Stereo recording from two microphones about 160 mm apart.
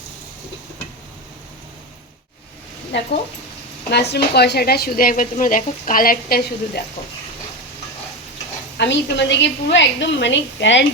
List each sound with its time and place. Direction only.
2.9 s a woman's voice: 90° left; by 6.8 s 70° left (ahead or behind)
8.8 s a woman's voice: 90° left